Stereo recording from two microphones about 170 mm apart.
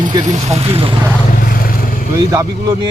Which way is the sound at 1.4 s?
55° left (ahead or behind).